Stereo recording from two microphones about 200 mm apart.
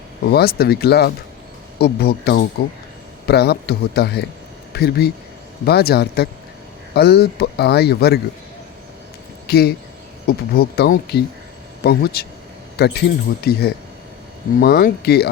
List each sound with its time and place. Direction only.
0.3 s speech: 50° left (ahead or behind)
9.5 s speech: 55° left (ahead or behind)